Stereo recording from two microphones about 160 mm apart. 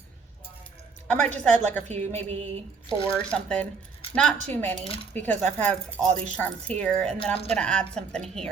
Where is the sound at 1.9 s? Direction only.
45° right (ahead or behind).